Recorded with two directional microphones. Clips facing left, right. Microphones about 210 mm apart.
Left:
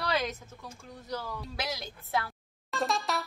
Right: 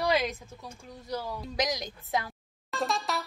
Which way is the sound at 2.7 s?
Centre (ahead or behind).